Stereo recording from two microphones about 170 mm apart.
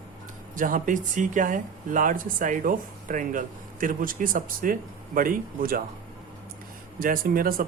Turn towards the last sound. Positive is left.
turn(degrees=-55)  # may be behind; listen again after turning